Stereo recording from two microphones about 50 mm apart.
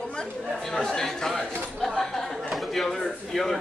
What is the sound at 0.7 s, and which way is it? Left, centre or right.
Chatter, centre.